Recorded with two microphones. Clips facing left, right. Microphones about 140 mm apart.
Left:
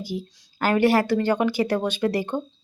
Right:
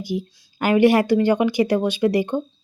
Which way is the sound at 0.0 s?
15° right (ahead or behind).